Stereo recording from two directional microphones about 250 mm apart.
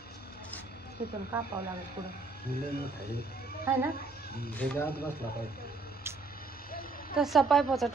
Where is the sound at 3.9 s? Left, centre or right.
Left.